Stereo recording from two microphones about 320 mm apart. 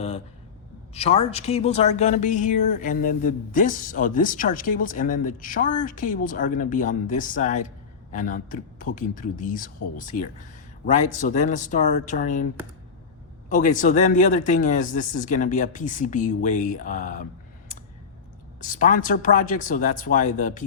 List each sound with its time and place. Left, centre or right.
0.9 s speech: centre
13.5 s speech: left
18.6 s speech: left